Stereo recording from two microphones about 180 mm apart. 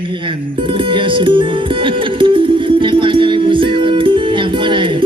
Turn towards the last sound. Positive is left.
turn(degrees=-25)  # may be behind; listen again after turning